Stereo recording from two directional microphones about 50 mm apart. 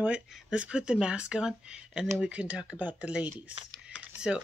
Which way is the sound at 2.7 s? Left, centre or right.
Right.